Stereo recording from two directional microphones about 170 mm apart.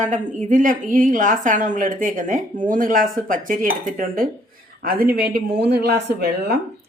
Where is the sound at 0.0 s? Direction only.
50° right (ahead or behind); by 6.6 s 80° right.